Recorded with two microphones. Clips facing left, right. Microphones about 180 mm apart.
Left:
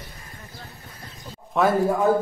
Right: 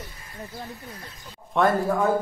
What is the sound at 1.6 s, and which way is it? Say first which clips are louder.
Speech: left 1 dB; centre (ahead or behind).